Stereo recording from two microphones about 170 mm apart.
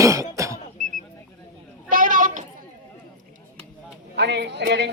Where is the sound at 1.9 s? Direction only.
50° right (ahead or behind).